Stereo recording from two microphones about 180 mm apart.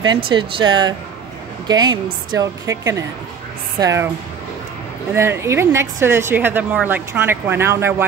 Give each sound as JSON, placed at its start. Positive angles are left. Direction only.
{"t": 0.1, "sound": "a woman's voice", "side_deg": -25}
{"t": 5.1, "sound": "a woman's voice", "side_deg": -15}